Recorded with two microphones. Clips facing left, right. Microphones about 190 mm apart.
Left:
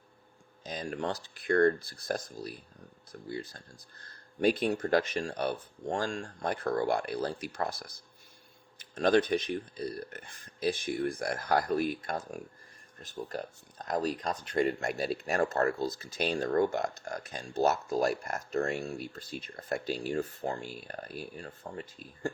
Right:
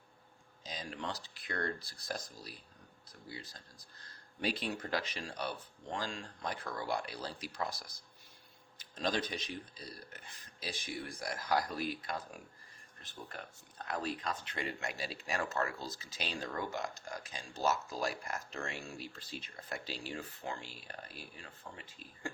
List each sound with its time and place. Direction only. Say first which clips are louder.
0.6 s speech: left 8 dB; 55° left (ahead or behind)
15.4 s speech: left 8 dB; 40° left (ahead or behind)
16.0 s speech: left 10 dB; 55° left (ahead or behind)